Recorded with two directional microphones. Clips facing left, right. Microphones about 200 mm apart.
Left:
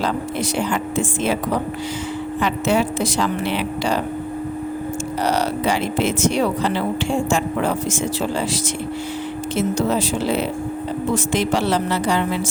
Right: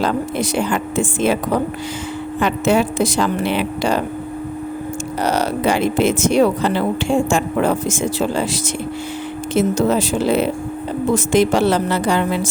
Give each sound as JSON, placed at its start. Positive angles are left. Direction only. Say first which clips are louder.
{"t": 0.0, "sound": "a woman's voice", "louder": "right 3 dB", "side_deg": -50}
{"t": 2.4, "sound": "a woman's voice", "louder": "right 3 dB", "side_deg": -50}
{"t": 5.2, "sound": "a sound", "louder": "right 3 dB", "side_deg": -50}
{"t": 6.0, "sound": "a woman's voice", "louder": "right 5 dB", "side_deg": -50}
{"t": 9.6, "sound": "a woman's voice", "louder": "right 4 dB", "side_deg": -50}